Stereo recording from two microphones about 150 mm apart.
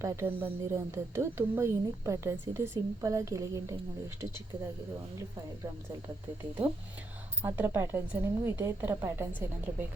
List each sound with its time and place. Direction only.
0.0 s speech: 20° right (ahead or behind)
7.4 s a woman's voice: 15° right (ahead or behind)